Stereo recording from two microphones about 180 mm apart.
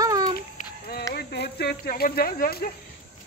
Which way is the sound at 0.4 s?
55° left (ahead or behind).